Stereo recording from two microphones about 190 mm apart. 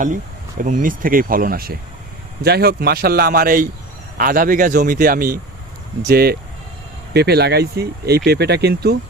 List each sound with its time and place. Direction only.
0.6 s a man's voice: 45° right (ahead or behind)